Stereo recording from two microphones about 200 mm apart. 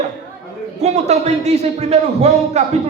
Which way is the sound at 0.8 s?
35° right (ahead or behind).